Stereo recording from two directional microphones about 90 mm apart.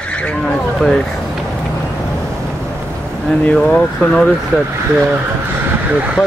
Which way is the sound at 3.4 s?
10° left (ahead or behind).